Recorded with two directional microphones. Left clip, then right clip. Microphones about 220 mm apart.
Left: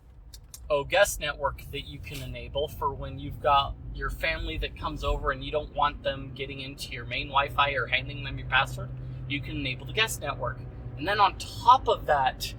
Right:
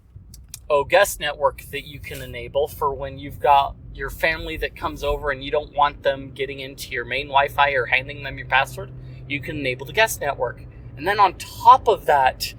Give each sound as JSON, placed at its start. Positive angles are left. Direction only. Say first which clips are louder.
{"t": 0.7, "sound": "speech", "louder": "right 7 dB", "side_deg": -45}